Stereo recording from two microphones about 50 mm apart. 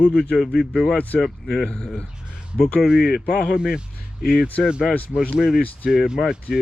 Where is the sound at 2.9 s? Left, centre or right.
Centre.